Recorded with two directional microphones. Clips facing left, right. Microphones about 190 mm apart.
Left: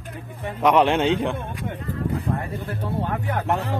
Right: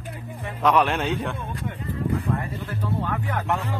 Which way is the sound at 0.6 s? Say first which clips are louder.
Left 3 dB; 20° left (ahead or behind).